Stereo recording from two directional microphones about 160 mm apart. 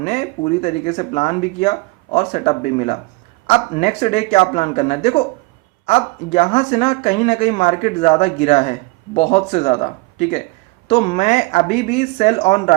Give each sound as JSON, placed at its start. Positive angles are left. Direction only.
{"t": 0.0, "sound": "speech", "side_deg": 45}
{"t": 10.8, "sound": "speech", "side_deg": 35}
{"t": 11.2, "sound": "speech", "side_deg": 50}